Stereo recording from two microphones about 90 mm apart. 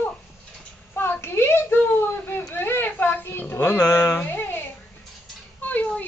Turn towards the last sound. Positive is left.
turn(degrees=15)  # may be behind; listen again after turning